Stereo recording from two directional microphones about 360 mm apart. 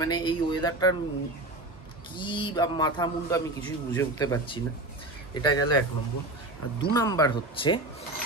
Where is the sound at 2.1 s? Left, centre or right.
Centre.